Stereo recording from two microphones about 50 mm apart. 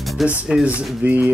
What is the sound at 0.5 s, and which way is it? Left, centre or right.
Speech, centre.